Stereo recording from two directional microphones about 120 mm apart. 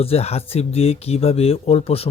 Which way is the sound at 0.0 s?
55° left (ahead or behind).